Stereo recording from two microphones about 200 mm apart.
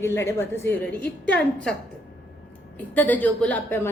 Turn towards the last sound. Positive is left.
turn(degrees=10)  # may be behind; listen again after turning